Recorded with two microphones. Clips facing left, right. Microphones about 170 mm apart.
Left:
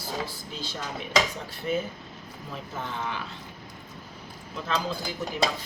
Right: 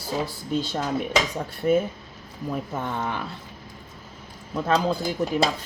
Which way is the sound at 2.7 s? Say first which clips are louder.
Right 5 dB; 50° right (ahead or behind).